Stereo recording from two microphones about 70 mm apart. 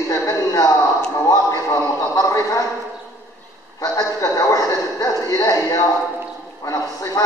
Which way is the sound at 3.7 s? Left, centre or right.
Left.